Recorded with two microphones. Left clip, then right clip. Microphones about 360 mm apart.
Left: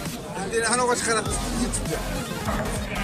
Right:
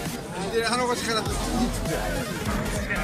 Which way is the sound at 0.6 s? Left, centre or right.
Left.